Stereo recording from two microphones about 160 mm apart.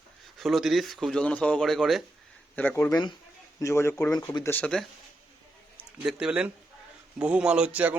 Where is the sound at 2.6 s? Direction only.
10° left (ahead or behind).